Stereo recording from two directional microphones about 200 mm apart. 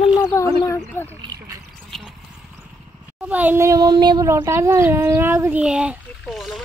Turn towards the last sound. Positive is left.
turn(degrees=0)  # may be behind; listen again after turning